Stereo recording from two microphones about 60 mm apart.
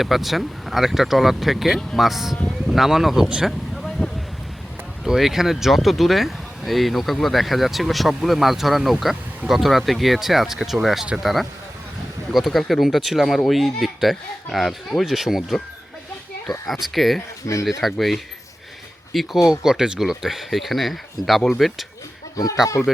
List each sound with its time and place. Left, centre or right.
0.0 s speech: centre
5.0 s speech: centre
19.5 s speech: centre